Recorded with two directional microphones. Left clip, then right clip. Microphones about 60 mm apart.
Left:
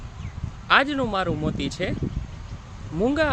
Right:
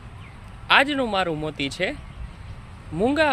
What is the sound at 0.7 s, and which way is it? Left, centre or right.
Speech, centre.